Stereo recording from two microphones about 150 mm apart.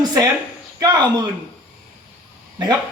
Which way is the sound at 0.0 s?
25° right (ahead or behind).